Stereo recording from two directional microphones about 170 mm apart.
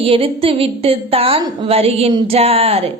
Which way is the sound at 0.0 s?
35° right (ahead or behind).